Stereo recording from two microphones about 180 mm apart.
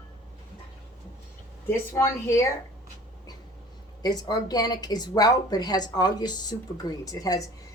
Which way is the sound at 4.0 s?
20° left (ahead or behind).